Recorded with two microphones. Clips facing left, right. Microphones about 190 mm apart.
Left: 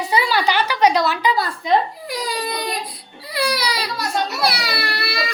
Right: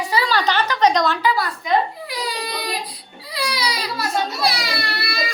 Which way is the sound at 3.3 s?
60° left (ahead or behind).